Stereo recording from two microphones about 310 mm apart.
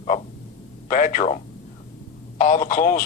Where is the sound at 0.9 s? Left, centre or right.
Left.